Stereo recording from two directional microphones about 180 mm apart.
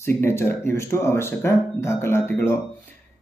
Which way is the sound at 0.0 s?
15° left (ahead or behind).